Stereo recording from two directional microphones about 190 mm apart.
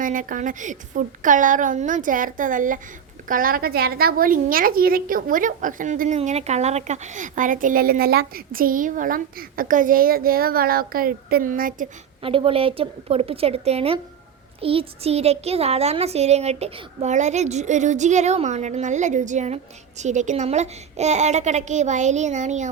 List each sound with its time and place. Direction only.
0.0 s a woman's voice: 45° right (ahead or behind)
12.2 s a woman's voice: 30° right (ahead or behind)